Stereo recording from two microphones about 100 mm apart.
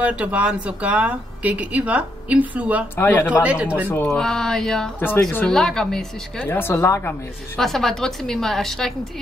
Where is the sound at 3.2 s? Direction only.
10° right (ahead or behind).